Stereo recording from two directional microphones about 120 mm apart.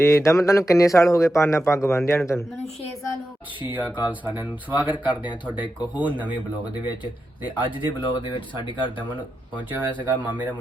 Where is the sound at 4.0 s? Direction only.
15° right (ahead or behind).